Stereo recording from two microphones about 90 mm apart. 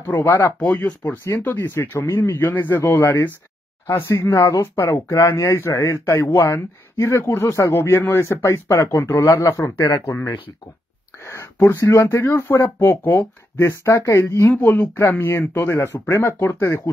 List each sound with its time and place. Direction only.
0.0 s speech: 25° left (ahead or behind)
11.2 s speech: 30° left (ahead or behind)